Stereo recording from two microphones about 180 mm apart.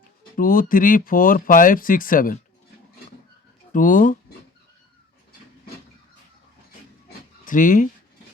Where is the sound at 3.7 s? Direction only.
45° left (ahead or behind).